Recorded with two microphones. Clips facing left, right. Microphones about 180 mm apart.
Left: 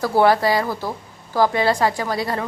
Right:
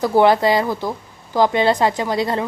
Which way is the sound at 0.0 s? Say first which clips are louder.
Right 2 dB; 20° right (ahead or behind).